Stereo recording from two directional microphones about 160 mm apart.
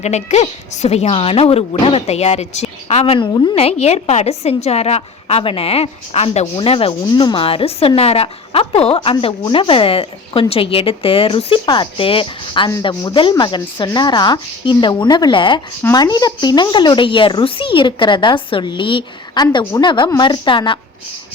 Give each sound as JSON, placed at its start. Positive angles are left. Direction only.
{"t": 0.0, "sound": "a woman's voice", "side_deg": 45}
{"t": 3.5, "sound": "speech", "side_deg": 40}